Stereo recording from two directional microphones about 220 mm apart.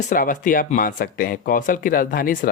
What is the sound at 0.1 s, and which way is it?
Speech, 35° left (ahead or behind).